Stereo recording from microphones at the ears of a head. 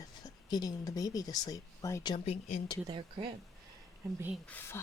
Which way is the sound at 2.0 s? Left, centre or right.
Left.